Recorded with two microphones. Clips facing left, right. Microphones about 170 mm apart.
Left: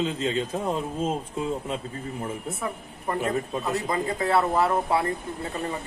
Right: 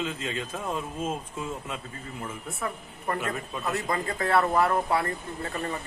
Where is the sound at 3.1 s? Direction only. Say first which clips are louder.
Left 6 dB; 35° left (ahead or behind).